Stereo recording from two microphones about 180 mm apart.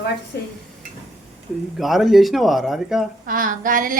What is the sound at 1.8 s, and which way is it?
Speech, centre (ahead or behind).